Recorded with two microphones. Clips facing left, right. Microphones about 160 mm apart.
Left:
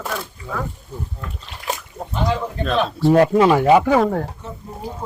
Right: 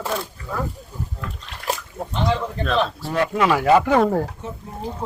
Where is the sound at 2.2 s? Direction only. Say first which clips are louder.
Left 1 dB; centre (ahead or behind).